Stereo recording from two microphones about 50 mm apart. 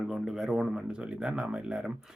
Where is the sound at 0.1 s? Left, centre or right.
Centre.